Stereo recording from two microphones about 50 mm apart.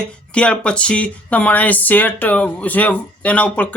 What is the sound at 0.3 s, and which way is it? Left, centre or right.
Speech, left.